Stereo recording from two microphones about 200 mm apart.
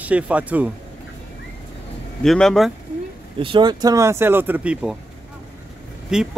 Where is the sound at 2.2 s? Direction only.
Centre (ahead or behind).